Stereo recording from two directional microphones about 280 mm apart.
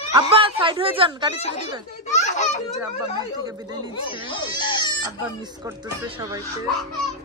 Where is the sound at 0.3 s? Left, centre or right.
Centre.